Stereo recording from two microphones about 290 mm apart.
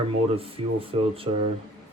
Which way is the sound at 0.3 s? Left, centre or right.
Centre.